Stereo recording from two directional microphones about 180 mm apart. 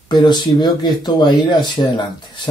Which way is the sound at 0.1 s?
25° left (ahead or behind).